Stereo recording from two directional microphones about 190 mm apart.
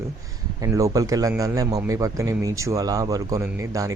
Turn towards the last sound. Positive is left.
turn(degrees=-15)  # may be behind; listen again after turning